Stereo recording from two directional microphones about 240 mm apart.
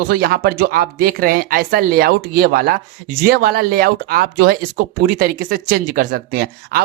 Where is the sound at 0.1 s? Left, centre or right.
Right.